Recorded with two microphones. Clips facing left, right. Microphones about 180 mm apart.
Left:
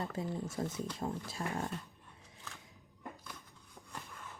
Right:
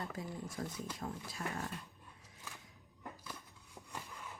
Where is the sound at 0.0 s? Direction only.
25° left (ahead or behind).